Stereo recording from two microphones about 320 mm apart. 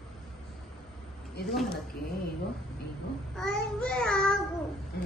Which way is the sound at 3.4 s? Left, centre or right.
Centre.